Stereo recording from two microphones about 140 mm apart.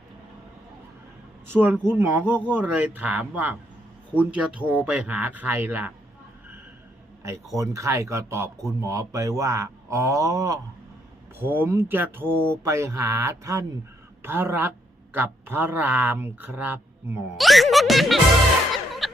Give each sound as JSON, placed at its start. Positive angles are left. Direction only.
{"t": 1.9, "sound": "speech", "side_deg": -15}
{"t": 7.2, "sound": "a man's voice", "side_deg": -20}
{"t": 11.3, "sound": "a man's voice", "side_deg": -15}
{"t": 17.3, "sound": "speech", "side_deg": 0}
{"t": 18.7, "sound": "music", "side_deg": 0}